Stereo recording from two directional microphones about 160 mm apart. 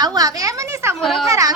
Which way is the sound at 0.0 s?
25° right (ahead or behind).